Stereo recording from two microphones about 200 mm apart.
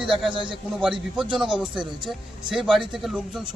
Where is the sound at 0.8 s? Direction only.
Centre (ahead or behind).